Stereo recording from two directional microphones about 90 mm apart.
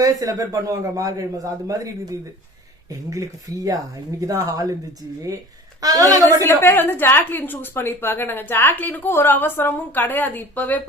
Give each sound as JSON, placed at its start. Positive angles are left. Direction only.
{"t": 0.0, "sound": "a man's voice", "side_deg": -40}
{"t": 5.8, "sound": "a man's voice", "side_deg": -40}
{"t": 6.4, "sound": "a woman's voice", "side_deg": 25}